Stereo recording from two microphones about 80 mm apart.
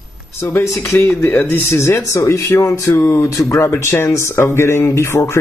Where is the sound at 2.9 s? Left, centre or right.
Left.